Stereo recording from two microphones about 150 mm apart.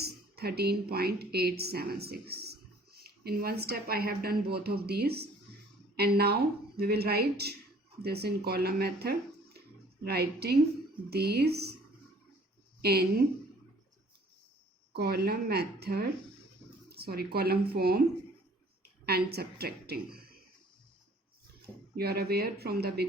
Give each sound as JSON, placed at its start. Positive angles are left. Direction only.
{"t": 0.0, "sound": "speech", "side_deg": -90}
{"t": 12.8, "sound": "speech", "side_deg": -90}
{"t": 14.9, "sound": "speech", "side_deg": -90}
{"t": 19.0, "sound": "a woman's voice", "side_deg": -90}
{"t": 21.9, "sound": "speech", "side_deg": -90}